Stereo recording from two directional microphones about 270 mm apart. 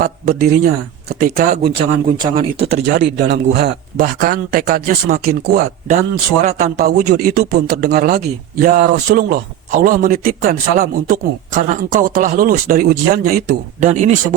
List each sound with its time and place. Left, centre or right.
0.0 s speech: right
2.8 s speech: right
6.4 s speech: right